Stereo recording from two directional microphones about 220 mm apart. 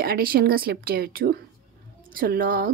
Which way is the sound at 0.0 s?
45° right (ahead or behind).